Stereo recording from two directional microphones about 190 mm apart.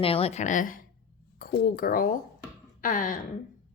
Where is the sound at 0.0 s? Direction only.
30° left (ahead or behind).